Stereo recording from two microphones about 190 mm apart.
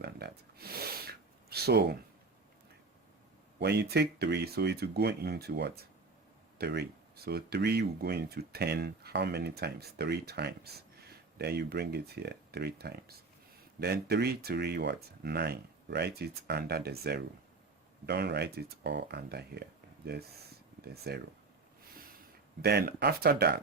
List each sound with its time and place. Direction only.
0.0 s a sound: 55° right (ahead or behind)
3.6 s speech: 60° right (ahead or behind)
20.8 s speech: 55° right (ahead or behind)
22.2 s speech: 50° right (ahead or behind)